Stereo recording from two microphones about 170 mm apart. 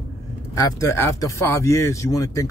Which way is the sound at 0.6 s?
20° left (ahead or behind).